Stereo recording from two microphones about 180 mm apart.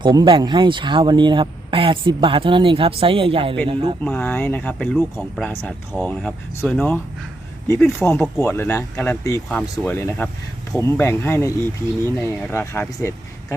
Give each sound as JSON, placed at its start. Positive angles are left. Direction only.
{"t": 0.0, "sound": "speech", "side_deg": -25}
{"t": 4.0, "sound": "speech", "side_deg": 10}
{"t": 7.8, "sound": "speech", "side_deg": 0}
{"t": 8.1, "sound": "speech", "side_deg": 10}